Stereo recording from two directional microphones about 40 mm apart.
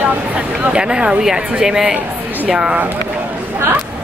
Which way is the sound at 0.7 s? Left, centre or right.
Right.